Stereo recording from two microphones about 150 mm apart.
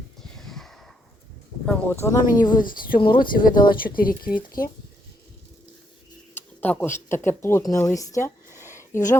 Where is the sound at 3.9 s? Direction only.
70° left (ahead or behind).